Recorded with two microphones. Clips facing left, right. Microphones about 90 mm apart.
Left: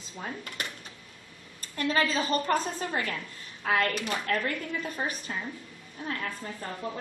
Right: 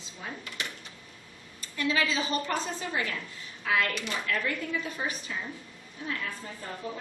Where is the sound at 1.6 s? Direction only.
45° left (ahead or behind).